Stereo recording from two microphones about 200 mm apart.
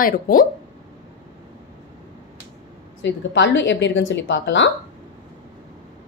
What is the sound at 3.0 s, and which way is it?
A woman's voice, 60° left (ahead or behind).